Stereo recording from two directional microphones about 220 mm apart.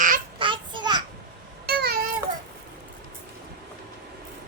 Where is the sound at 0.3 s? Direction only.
20° right (ahead or behind).